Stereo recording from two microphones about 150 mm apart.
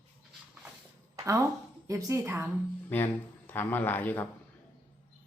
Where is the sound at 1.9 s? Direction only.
20° right (ahead or behind).